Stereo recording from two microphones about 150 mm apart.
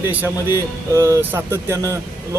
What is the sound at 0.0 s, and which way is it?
Speech, 15° right (ahead or behind).